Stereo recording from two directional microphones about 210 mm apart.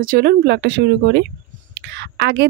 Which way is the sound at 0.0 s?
45° right (ahead or behind).